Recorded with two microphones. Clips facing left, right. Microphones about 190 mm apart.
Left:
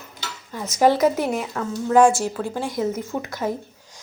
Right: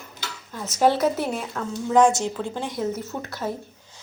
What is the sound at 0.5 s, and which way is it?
A woman's voice, 10° left (ahead or behind).